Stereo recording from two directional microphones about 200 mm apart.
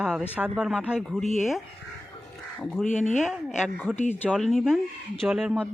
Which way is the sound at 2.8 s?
35° left (ahead or behind).